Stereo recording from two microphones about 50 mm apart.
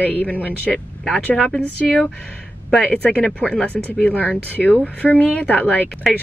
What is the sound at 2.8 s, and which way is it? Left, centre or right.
Speech, left.